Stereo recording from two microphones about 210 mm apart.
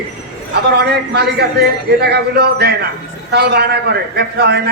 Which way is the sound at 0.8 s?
50° right (ahead or behind).